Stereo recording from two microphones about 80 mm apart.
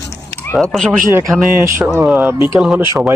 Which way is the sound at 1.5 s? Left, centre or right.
Right.